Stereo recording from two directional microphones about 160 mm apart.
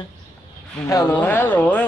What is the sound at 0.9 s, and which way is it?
Speech, 15° left (ahead or behind).